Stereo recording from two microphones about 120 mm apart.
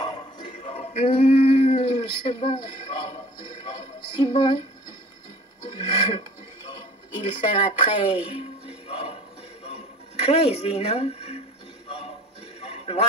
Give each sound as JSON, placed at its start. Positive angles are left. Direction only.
{"t": 0.0, "sound": "a sound", "side_deg": 40}
{"t": 5.7, "sound": "television", "side_deg": 45}
{"t": 7.8, "sound": "speech", "side_deg": 45}
{"t": 8.8, "sound": "music", "side_deg": 55}
{"t": 10.2, "sound": "speech", "side_deg": 60}
{"t": 12.5, "sound": "music", "side_deg": 60}